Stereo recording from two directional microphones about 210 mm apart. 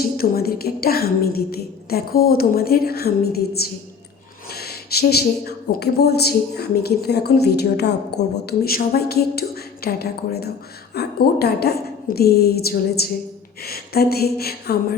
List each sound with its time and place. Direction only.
0.0 s speech: 45° left (ahead or behind)